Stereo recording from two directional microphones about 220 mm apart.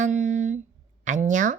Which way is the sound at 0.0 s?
35° right (ahead or behind).